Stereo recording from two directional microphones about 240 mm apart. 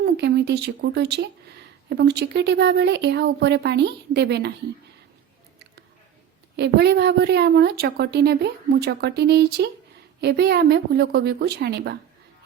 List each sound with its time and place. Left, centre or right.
0.0 s a woman's voice: right
6.6 s a woman's voice: right